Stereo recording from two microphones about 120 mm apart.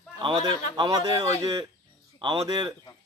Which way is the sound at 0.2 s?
45° right (ahead or behind).